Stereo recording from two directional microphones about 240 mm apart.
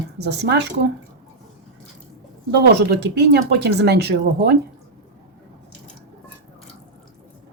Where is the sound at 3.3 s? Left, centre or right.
Right.